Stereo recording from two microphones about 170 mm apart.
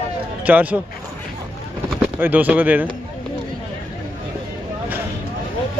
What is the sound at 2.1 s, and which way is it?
Speech, 10° right (ahead or behind).